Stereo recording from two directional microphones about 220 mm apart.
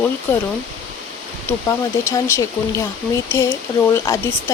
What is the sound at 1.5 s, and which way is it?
Speech, 15° left (ahead or behind).